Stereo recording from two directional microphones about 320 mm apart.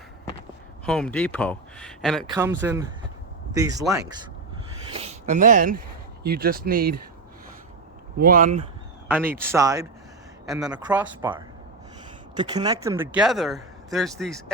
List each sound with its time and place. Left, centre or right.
0.9 s speech: centre
4.9 s a sound: centre
6.2 s speech: right
8.2 s speech: right
9.0 s speech: centre